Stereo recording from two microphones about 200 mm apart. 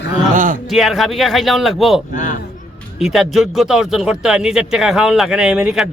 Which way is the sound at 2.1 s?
40° left (ahead or behind).